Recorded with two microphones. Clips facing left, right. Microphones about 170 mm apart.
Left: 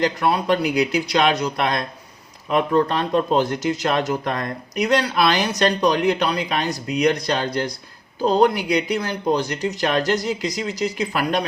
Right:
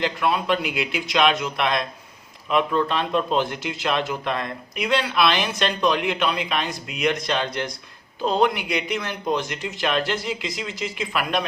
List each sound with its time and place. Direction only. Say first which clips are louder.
0.0 s speech: left 3 dB; 40° left (ahead or behind)